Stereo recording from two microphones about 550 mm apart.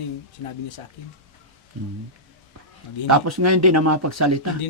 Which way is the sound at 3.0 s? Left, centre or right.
Right.